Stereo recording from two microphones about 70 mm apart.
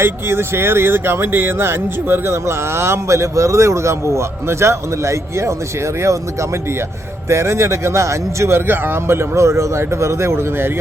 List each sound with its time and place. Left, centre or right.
0.0 s speech: right
7.3 s speech: right